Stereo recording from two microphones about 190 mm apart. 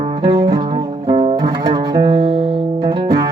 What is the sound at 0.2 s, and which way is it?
Music, 25° right (ahead or behind).